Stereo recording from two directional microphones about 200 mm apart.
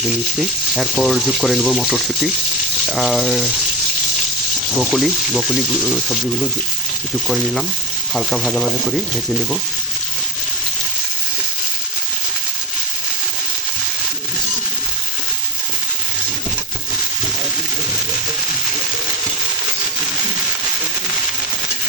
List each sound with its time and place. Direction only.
0.3 s speech: centre (ahead or behind)
4.8 s speech: centre (ahead or behind)
8.1 s speech: centre (ahead or behind)